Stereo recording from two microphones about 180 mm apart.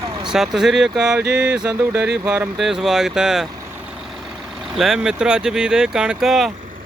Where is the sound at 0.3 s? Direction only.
Centre (ahead or behind).